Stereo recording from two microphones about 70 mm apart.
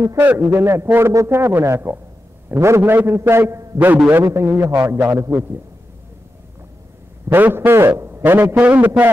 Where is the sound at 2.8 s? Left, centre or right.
Right.